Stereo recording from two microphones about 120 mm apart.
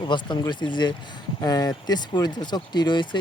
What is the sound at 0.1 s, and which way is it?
Speech, 40° left (ahead or behind).